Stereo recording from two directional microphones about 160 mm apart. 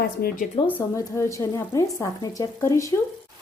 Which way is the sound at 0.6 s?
15° left (ahead or behind).